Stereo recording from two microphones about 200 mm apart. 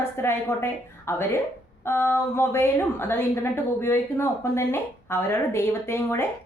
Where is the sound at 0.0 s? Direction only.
10° left (ahead or behind).